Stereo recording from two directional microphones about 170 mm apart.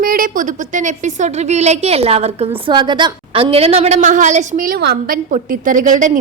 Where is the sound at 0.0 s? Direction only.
55° right (ahead or behind).